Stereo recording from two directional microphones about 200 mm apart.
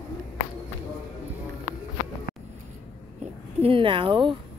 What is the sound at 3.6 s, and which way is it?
Speech, 25° right (ahead or behind).